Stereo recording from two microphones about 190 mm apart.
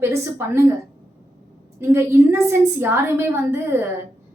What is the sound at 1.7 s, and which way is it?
A woman's voice, 15° right (ahead or behind).